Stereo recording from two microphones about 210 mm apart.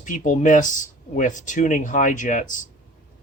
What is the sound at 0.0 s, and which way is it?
Speech, 35° left (ahead or behind).